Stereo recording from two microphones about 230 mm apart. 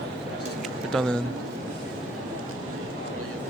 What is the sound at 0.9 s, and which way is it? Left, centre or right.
Speech, centre.